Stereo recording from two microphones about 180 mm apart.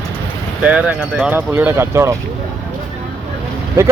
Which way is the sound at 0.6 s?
5° right (ahead or behind).